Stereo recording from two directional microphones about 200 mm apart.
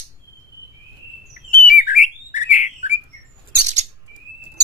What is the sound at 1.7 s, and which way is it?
Bird, 40° left (ahead or behind).